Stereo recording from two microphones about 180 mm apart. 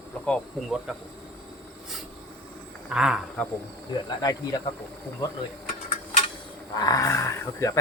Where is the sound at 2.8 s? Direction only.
5° right (ahead or behind).